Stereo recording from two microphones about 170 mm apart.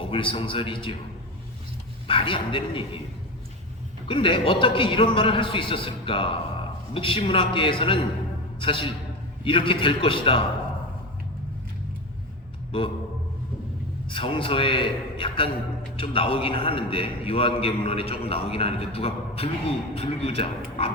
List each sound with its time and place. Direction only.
0.0 s a man's voice: 30° left (ahead or behind)
2.0 s a man's voice: 30° left (ahead or behind)
4.1 s a man's voice: 30° left (ahead or behind)
14.1 s a man's voice: 30° left (ahead or behind)